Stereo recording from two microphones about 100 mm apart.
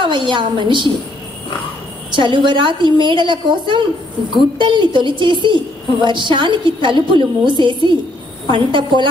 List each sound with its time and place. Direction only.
0.0 s a woman's voice: 50° right (ahead or behind)
2.1 s a woman's voice: 55° right (ahead or behind)